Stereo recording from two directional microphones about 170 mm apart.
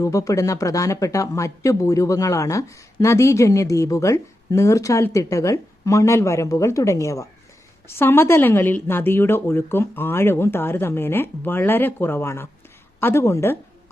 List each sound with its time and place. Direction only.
0.0 s speech: 20° left (ahead or behind)